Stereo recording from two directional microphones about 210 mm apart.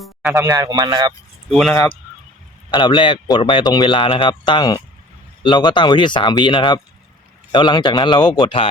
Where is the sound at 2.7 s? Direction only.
25° left (ahead or behind).